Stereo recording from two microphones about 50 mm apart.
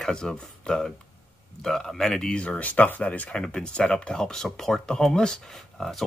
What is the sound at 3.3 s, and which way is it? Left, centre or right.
Speech, centre.